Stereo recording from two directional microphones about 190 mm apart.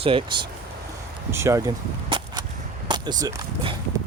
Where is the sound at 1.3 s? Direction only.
15° right (ahead or behind).